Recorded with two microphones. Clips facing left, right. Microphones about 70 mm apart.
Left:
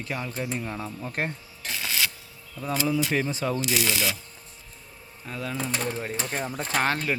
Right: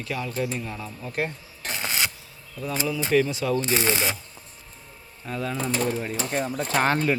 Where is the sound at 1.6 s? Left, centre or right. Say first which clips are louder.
Right 1 dB; right.